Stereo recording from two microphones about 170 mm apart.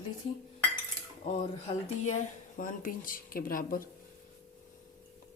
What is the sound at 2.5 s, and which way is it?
Speech, 50° left (ahead or behind).